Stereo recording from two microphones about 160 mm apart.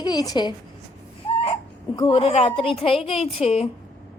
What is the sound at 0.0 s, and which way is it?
Speech, 25° left (ahead or behind).